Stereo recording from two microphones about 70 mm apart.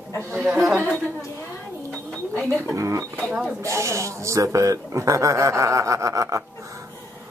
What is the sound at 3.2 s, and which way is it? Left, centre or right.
Speech, centre.